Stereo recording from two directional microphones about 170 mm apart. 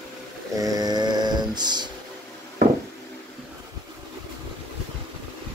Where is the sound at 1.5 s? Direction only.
25° right (ahead or behind).